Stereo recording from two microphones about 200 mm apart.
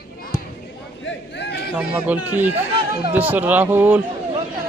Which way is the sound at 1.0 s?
60° left (ahead or behind).